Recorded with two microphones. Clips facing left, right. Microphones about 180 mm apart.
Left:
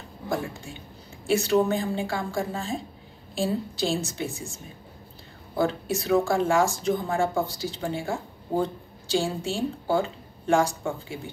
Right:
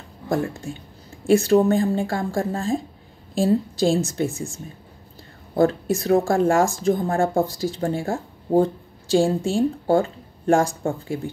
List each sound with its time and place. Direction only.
1.3 s speech: 50° right (ahead or behind)
5.5 s speech: 45° right (ahead or behind)